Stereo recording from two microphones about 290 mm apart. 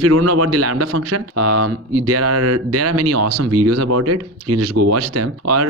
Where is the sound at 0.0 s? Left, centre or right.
Right.